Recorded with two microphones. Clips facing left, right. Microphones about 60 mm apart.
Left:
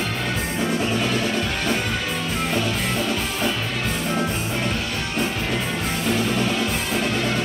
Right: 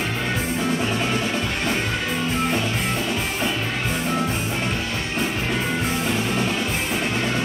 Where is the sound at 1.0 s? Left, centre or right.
Centre.